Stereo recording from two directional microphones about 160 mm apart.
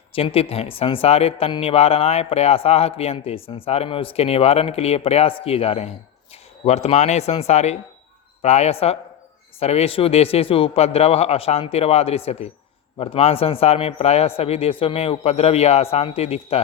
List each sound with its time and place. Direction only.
0.1 s a man's voice: 35° left (ahead or behind)